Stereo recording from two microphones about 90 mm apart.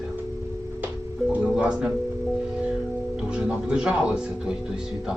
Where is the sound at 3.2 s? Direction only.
10° right (ahead or behind).